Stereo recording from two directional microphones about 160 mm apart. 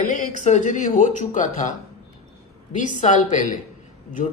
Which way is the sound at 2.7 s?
50° left (ahead or behind).